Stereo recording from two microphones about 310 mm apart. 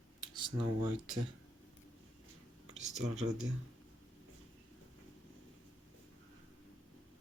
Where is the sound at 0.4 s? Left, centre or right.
Centre.